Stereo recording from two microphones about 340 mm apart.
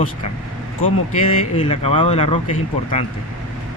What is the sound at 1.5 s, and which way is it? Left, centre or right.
Speech, centre.